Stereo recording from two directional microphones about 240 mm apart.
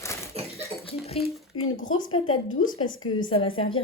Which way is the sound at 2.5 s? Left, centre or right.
Left.